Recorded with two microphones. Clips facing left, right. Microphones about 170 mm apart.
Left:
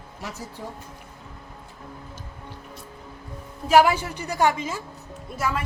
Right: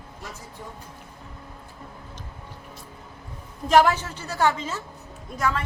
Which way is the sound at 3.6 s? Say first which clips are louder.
Left 1 dB; 10° left (ahead or behind).